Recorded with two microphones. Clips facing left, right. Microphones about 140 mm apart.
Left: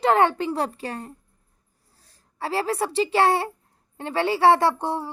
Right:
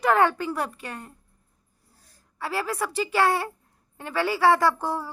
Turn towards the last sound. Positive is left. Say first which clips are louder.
# left 1 dB
turn(degrees=25)  # may be behind; listen again after turning